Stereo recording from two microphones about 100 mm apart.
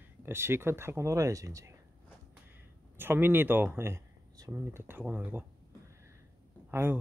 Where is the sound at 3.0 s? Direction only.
20° right (ahead or behind).